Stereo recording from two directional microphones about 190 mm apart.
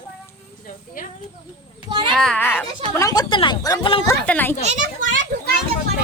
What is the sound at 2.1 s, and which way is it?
Speech, 5° left (ahead or behind).